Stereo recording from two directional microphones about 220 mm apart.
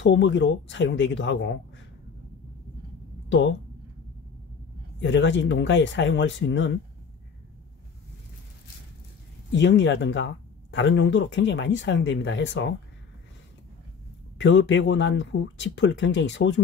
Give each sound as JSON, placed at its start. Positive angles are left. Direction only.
{"t": 0.0, "sound": "speech", "side_deg": 55}
{"t": 3.3, "sound": "speech", "side_deg": 55}
{"t": 5.0, "sound": "speech", "side_deg": 55}
{"t": 9.5, "sound": "speech", "side_deg": 55}
{"t": 14.4, "sound": "speech", "side_deg": 55}